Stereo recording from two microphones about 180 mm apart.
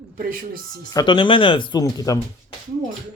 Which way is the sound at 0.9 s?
25° left (ahead or behind).